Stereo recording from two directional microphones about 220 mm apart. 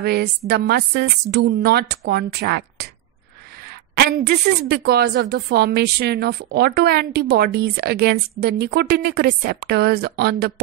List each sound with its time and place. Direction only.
0.0 s a woman's voice: 45° right (ahead or behind)